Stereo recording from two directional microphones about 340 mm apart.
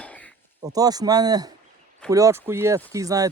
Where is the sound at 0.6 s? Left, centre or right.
Centre.